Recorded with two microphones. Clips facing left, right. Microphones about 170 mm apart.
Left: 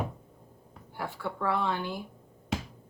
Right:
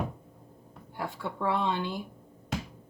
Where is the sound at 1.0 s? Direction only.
20° right (ahead or behind).